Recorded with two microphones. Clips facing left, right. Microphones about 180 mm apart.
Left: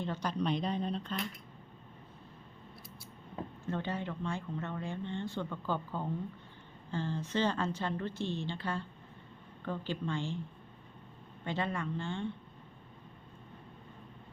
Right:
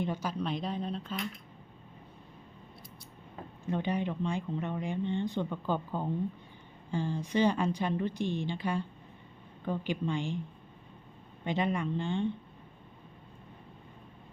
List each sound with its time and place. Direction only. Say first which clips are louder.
0.0 s speech: right 1 dB; 10° right (ahead or behind)
3.7 s speech: right 5 dB; 15° right (ahead or behind)
11.4 s speech: right 4 dB; 15° right (ahead or behind)